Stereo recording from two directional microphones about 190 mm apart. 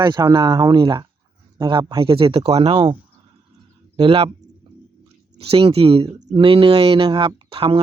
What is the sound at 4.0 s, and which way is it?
Speech, 30° right (ahead or behind).